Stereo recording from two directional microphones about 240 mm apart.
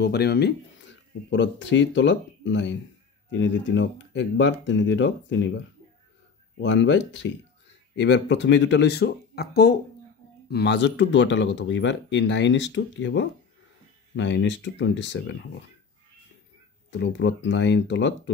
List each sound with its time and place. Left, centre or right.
0.0 s speech: left
6.6 s speech: left
16.9 s speech: left